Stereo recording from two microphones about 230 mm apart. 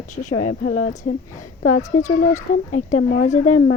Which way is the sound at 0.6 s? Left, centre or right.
Left.